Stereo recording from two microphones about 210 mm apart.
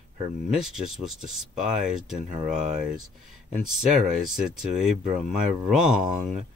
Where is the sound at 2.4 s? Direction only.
35° right (ahead or behind).